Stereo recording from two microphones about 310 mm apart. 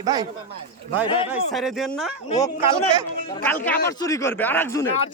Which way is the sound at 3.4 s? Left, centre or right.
Centre.